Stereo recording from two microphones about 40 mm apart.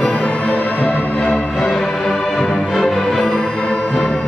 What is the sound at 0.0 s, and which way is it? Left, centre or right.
Music, left.